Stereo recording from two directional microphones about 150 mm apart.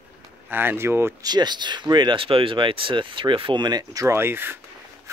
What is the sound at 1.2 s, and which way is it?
Speech, 30° right (ahead or behind).